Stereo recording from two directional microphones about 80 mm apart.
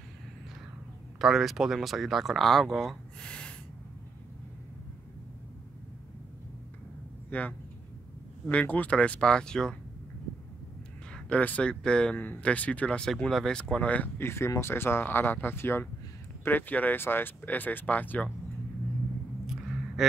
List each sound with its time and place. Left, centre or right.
1.2 s speech: centre
3.2 s gasp: centre
7.2 s speech: centre
11.1 s speech: centre
13.1 s speech: centre
14.1 s speech: left
19.4 s a sound: centre